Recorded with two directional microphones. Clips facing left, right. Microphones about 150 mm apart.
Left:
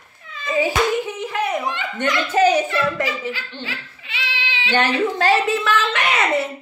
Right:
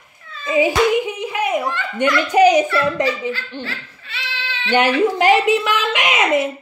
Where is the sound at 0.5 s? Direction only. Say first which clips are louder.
Right 4 dB; 15° right (ahead or behind).